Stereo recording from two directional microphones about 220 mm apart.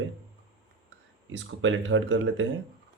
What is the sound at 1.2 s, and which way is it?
Speech, 60° right (ahead or behind).